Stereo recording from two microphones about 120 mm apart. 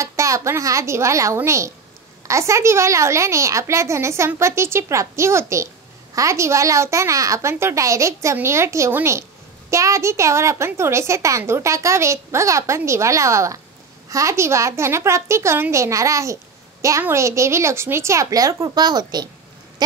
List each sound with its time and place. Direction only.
0.0 s a child's voice: 25° right (ahead or behind)